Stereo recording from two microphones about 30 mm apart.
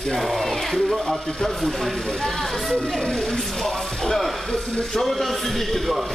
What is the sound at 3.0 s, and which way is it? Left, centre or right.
Speech, left.